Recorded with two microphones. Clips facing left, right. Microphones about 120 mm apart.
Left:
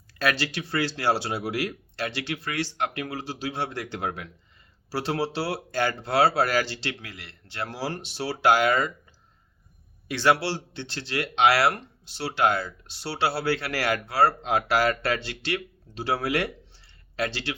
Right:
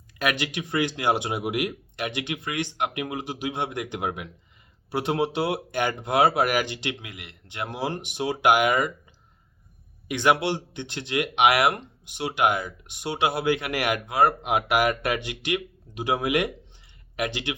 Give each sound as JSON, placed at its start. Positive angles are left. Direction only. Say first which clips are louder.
{"t": 0.2, "sound": "speech", "louder": "even", "side_deg": -20}
{"t": 10.1, "sound": "speech", "louder": "right 1 dB", "side_deg": -20}